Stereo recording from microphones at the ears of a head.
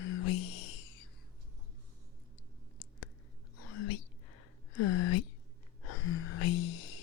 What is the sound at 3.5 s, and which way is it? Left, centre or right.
Whispering, left.